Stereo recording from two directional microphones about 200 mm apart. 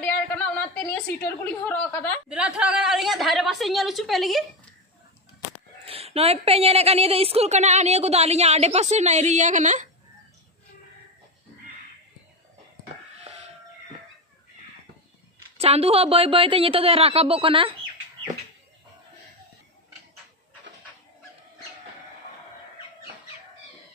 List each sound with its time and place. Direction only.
0.0 s a sound: 5° left (ahead or behind)
1.2 s a woman's voice: 10° left (ahead or behind)
2.2 s a woman's voice: 5° right (ahead or behind)
5.9 s a woman's voice: 30° right (ahead or behind)
15.6 s a woman's voice: 30° right (ahead or behind)